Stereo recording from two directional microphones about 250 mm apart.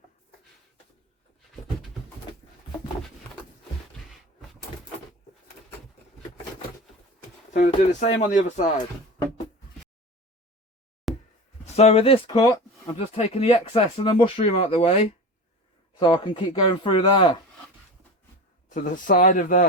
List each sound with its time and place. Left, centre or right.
7.5 s speech: left
11.1 s a sound: centre
11.6 s speech: left
18.7 s speech: left